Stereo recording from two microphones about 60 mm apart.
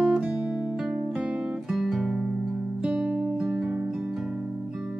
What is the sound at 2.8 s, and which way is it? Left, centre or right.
Music, centre.